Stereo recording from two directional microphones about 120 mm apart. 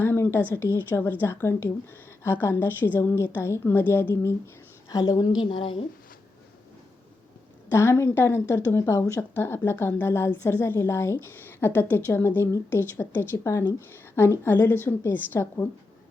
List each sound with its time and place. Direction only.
0.0 s a woman's voice: 20° left (ahead or behind)
4.9 s a woman's voice: 35° left (ahead or behind)
5.4 s speech: 45° left (ahead or behind)
7.7 s a woman's voice: 20° left (ahead or behind)